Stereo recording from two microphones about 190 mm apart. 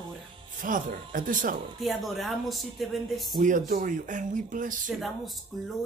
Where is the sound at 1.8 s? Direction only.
Centre (ahead or behind).